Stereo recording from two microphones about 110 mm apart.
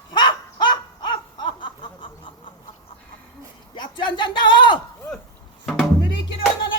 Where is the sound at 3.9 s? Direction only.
45° left (ahead or behind).